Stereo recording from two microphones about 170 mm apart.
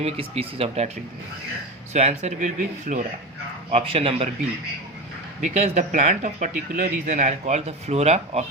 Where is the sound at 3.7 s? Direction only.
35° right (ahead or behind).